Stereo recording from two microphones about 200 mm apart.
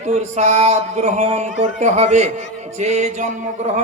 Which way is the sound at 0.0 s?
35° right (ahead or behind).